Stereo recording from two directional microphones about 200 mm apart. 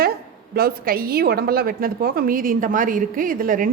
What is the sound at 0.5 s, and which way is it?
A woman's voice, 50° right (ahead or behind).